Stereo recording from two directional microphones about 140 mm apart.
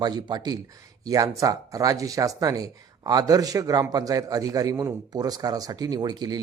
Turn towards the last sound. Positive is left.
turn(degrees=-30)  # may be behind; listen again after turning